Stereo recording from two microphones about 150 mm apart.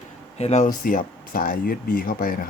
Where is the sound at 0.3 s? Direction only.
45° left (ahead or behind).